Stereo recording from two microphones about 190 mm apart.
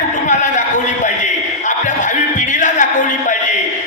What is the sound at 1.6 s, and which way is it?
Music, 40° left (ahead or behind).